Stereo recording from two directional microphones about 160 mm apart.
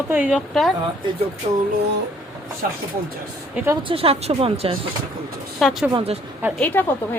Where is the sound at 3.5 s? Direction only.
15° right (ahead or behind).